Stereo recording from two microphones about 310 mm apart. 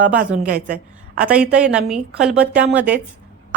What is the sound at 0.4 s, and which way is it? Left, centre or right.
Speech, right.